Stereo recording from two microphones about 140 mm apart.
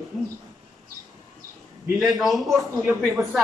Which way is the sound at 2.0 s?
Centre (ahead or behind).